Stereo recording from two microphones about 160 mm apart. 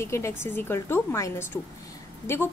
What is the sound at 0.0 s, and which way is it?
A woman's voice, 15° left (ahead or behind).